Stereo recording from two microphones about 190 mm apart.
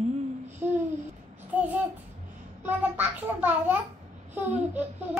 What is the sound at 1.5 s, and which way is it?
Child singing, 10° right (ahead or behind).